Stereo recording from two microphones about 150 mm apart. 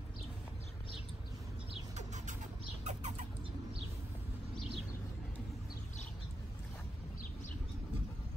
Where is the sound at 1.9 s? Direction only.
50° right (ahead or behind).